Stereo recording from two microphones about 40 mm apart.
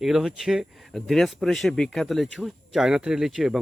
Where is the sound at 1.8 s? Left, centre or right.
Centre.